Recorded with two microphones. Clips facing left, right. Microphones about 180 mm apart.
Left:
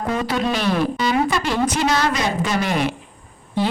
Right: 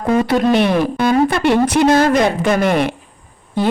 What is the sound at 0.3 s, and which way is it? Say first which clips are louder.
A woman's voice: right 7 dB; 60° right (ahead or behind).